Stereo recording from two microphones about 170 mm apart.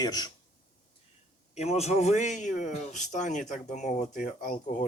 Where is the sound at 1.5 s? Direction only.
40° left (ahead or behind).